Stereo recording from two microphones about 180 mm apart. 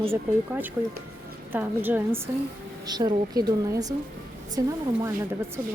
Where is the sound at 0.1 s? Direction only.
10° right (ahead or behind).